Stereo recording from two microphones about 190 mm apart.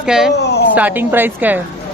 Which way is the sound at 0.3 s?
60° left (ahead or behind).